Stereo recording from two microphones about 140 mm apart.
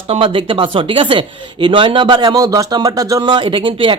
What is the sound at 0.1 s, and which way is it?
Speech, 40° right (ahead or behind).